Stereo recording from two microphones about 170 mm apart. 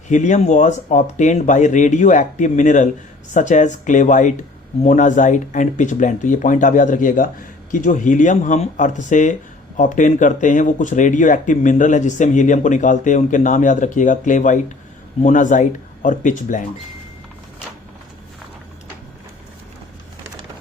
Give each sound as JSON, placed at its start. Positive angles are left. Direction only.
{"t": 0.1, "sound": "speech", "side_deg": 45}